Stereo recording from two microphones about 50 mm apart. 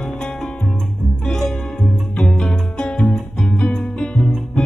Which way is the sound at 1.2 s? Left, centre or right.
Centre.